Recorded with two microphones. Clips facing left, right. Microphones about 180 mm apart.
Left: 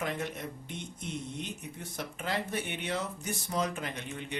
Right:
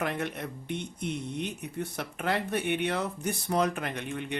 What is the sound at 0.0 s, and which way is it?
Speech, 60° right (ahead or behind).